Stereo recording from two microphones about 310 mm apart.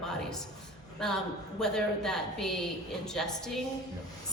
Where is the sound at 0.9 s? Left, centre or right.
Centre.